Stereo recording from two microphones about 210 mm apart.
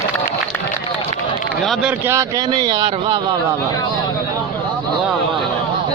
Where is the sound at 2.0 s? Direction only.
15° right (ahead or behind).